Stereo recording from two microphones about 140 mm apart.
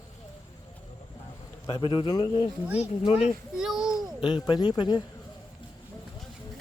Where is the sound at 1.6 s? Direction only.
35° left (ahead or behind).